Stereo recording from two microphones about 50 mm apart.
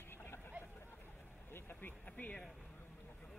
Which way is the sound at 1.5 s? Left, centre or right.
Left.